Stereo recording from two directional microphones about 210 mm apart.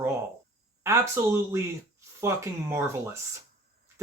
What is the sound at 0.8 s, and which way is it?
Speech, 15° right (ahead or behind).